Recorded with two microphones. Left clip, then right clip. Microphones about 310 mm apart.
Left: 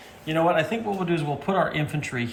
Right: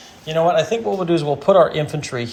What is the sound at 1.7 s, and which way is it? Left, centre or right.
Speech, centre.